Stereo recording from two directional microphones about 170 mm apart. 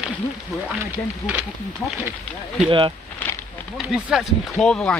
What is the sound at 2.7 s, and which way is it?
Speech, 30° right (ahead or behind).